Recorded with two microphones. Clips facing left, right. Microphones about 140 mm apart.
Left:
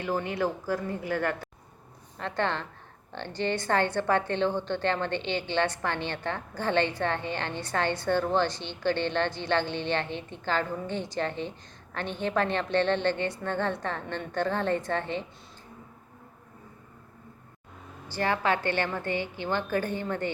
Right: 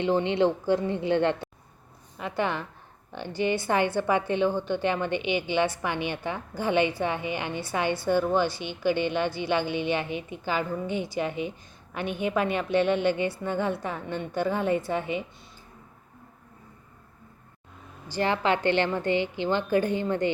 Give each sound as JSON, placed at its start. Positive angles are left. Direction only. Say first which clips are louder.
{"t": 0.0, "sound": "a woman's voice", "louder": "right 6 dB", "side_deg": -25}
{"t": 2.1, "sound": "a woman's voice", "louder": "right 1 dB", "side_deg": -10}
{"t": 18.1, "sound": "a woman's voice", "louder": "right 2 dB", "side_deg": -20}